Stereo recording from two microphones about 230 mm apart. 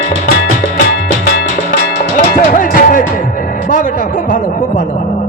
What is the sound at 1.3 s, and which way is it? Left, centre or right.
Music, left.